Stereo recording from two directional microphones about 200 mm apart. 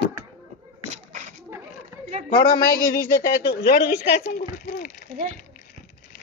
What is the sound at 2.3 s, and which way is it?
A woman's voice, 45° left (ahead or behind).